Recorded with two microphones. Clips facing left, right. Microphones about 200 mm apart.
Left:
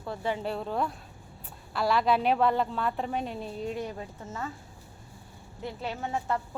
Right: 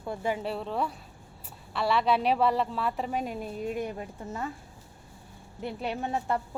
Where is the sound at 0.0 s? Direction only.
15° right (ahead or behind).